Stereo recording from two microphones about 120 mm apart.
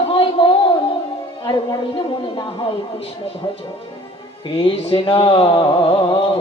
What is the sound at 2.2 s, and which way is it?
Speech, 45° left (ahead or behind).